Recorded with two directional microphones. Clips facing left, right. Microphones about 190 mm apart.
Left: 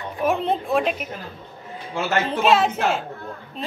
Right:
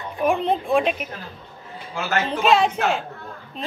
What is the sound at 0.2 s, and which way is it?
Speech, centre (ahead or behind).